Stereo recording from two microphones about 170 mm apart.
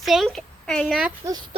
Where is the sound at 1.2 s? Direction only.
20° right (ahead or behind).